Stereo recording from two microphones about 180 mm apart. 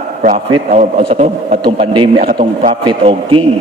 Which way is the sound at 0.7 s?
40° right (ahead or behind).